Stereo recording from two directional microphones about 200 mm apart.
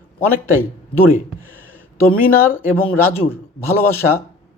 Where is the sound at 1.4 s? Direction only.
10° left (ahead or behind).